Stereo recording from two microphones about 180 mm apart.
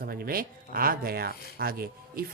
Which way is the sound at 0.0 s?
55° right (ahead or behind).